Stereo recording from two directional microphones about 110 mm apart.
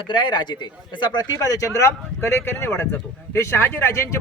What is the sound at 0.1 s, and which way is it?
A man's voice, 45° left (ahead or behind).